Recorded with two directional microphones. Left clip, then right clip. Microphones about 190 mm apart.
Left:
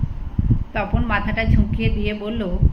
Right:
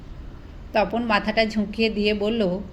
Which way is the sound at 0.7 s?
35° right (ahead or behind).